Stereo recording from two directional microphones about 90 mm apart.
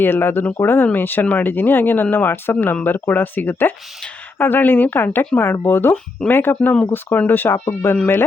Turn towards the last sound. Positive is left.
turn(degrees=30)  # may be behind; listen again after turning